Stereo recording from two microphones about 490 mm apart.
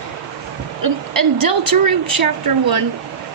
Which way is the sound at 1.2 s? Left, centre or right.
Right.